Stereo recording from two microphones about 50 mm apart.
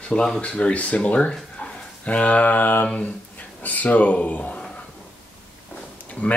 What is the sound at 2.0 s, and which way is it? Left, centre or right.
Mantra, left.